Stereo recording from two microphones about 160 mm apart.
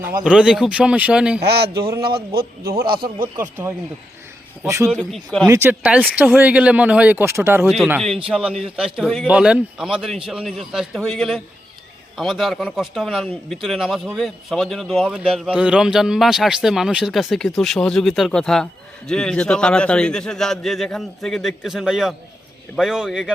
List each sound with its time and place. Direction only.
0.0 s speech: 10° right (ahead or behind)
1.4 s a man's voice: 90° right
2.0 s speech: 75° right (ahead or behind)
3.3 s speech: 15° right (ahead or behind)
4.9 s a man's voice: 5° left (ahead or behind)
5.5 s speech: 15° right (ahead or behind)
7.6 s a man's voice: centre (ahead or behind)